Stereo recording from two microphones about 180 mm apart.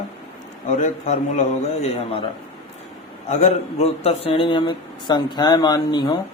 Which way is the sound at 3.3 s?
40° left (ahead or behind).